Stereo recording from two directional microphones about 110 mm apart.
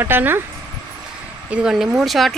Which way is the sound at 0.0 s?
20° right (ahead or behind).